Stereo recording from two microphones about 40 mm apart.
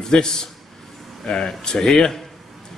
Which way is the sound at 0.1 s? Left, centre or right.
Centre.